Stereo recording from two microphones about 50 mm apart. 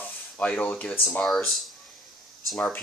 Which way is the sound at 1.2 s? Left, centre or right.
Centre.